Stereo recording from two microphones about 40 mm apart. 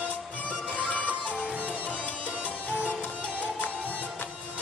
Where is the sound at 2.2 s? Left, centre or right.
Right.